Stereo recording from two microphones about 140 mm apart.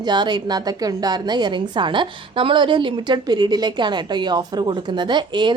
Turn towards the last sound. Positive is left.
turn(degrees=-35)  # may be behind; listen again after turning